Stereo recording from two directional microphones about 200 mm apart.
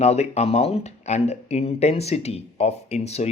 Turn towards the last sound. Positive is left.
turn(degrees=35)  # may be behind; listen again after turning